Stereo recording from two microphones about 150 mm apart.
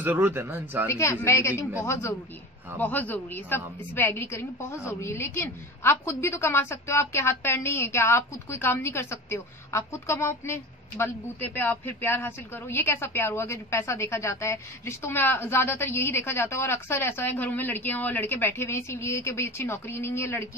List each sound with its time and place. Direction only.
0.0 s speech: 15° right (ahead or behind)
0.8 s a woman's voice: 20° left (ahead or behind)